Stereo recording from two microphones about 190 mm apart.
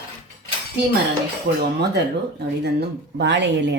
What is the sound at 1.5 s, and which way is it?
Speech, 60° right (ahead or behind).